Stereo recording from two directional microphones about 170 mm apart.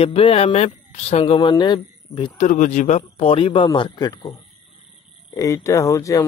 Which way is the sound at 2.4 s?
45° left (ahead or behind).